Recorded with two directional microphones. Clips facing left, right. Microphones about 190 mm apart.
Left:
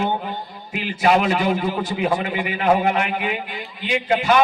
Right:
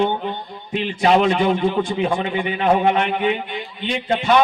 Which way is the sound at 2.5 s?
25° right (ahead or behind).